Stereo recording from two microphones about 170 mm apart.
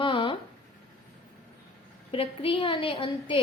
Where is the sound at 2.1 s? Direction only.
30° left (ahead or behind).